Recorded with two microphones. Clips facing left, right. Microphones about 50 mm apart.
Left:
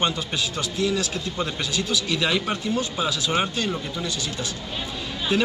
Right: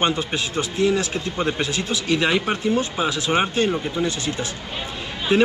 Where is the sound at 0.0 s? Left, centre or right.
Right.